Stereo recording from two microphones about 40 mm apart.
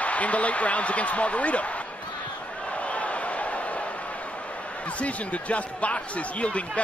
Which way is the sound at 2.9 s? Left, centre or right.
Left.